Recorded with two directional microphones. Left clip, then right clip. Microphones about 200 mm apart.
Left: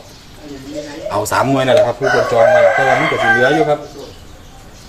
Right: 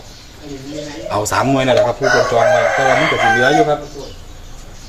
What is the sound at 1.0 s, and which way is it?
Speech, centre (ahead or behind).